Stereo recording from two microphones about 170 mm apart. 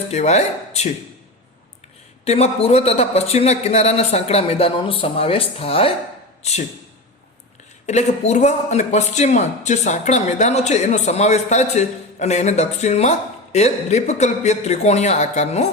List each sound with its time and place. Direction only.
0.1 s a man's voice: 40° left (ahead or behind)
2.2 s a man's voice: 40° left (ahead or behind)
7.9 s a man's voice: 40° left (ahead or behind)